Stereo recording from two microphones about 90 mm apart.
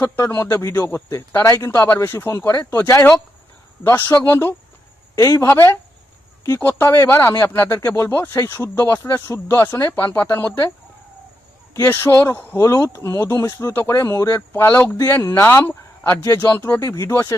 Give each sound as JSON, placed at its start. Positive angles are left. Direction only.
{"t": 0.0, "sound": "a man's voice", "side_deg": 30}
{"t": 1.5, "sound": "a man's voice", "side_deg": 35}
{"t": 11.7, "sound": "a man's voice", "side_deg": 30}
{"t": 13.7, "sound": "a man's voice", "side_deg": 25}
{"t": 16.8, "sound": "speech", "side_deg": 35}